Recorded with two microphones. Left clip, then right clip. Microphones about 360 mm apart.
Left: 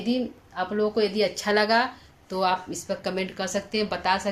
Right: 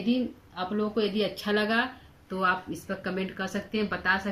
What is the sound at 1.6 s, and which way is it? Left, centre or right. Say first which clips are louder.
Speech: left 5 dB; centre.